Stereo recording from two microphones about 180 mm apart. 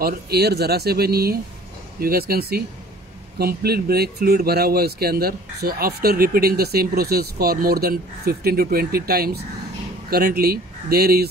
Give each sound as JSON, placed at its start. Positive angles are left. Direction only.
{"t": 0.0, "sound": "speech", "side_deg": -60}